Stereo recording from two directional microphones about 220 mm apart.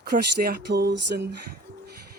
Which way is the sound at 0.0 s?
45° right (ahead or behind).